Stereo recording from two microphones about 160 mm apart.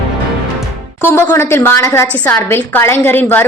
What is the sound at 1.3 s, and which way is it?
A woman's voice, 15° left (ahead or behind).